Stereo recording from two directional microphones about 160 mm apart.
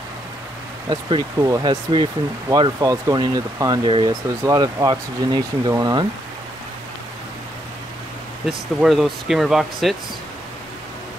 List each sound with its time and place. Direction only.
0.8 s speech: 20° right (ahead or behind)
8.5 s speech: centre (ahead or behind)